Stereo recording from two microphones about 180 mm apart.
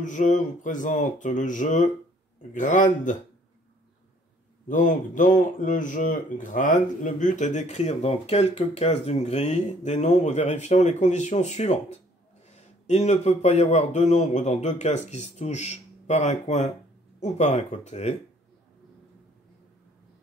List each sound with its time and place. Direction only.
0.0 s speech: 45° left (ahead or behind)
4.6 s speech: 45° left (ahead or behind)